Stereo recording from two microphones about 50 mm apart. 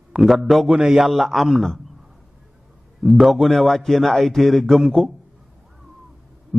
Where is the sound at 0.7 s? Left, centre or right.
Centre.